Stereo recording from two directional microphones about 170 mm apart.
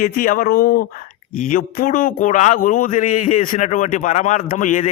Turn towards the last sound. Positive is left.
turn(degrees=50)  # may be behind; listen again after turning